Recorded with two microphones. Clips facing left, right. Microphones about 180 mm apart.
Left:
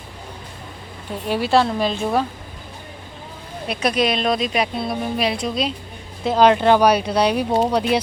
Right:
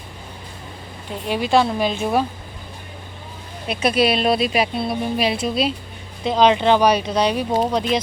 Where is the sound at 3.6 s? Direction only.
Centre (ahead or behind).